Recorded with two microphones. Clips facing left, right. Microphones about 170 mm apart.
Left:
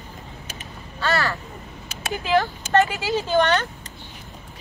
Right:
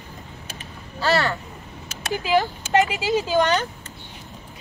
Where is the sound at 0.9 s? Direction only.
30° right (ahead or behind).